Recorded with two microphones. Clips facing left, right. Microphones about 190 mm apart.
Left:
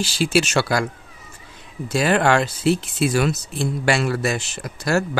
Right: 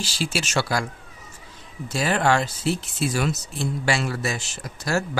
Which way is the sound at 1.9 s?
65° left (ahead or behind).